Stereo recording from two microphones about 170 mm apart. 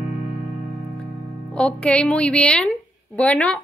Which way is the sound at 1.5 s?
5° left (ahead or behind).